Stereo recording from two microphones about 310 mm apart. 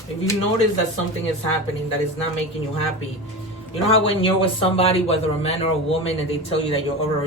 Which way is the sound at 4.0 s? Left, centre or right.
Centre.